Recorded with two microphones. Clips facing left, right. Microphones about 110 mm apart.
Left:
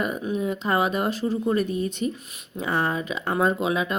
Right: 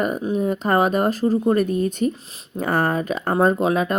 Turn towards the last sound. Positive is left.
turn(degrees=-45)  # may be behind; listen again after turning